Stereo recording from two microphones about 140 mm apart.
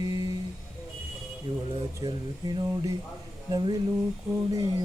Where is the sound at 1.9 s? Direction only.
25° right (ahead or behind).